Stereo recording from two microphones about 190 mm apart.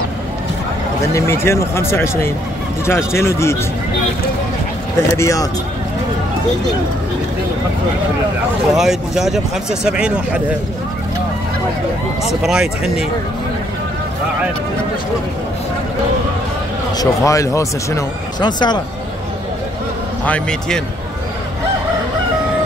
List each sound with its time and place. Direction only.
1.1 s speech: 15° left (ahead or behind)
4.9 s speech: 15° left (ahead or behind)
8.7 s speech: centre (ahead or behind)
12.3 s speech: centre (ahead or behind)
17.0 s speech: 15° left (ahead or behind)
20.2 s speech: 5° left (ahead or behind)